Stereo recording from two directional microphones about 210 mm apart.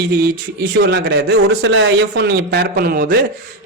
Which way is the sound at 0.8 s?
55° right (ahead or behind).